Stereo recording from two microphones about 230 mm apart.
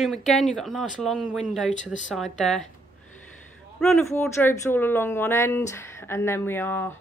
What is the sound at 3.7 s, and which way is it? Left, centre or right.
Speech, centre.